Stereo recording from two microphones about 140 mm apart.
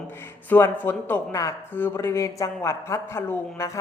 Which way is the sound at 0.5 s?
15° left (ahead or behind).